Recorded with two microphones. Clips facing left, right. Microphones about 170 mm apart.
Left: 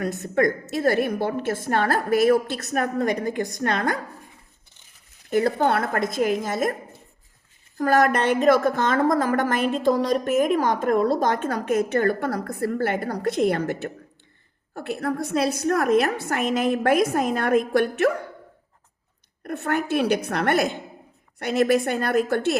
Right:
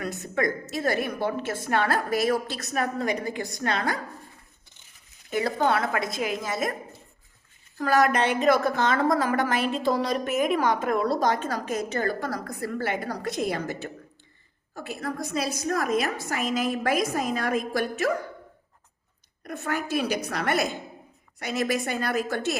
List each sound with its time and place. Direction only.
0.0 s a woman's voice: 55° left (ahead or behind)
5.3 s a woman's voice: 55° left (ahead or behind)
7.8 s a woman's voice: 50° left (ahead or behind)
19.5 s a woman's voice: 55° left (ahead or behind)